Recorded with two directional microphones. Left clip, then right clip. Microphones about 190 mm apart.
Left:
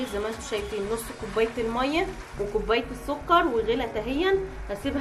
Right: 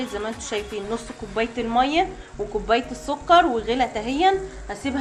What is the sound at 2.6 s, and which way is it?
A woman's voice, 30° right (ahead or behind).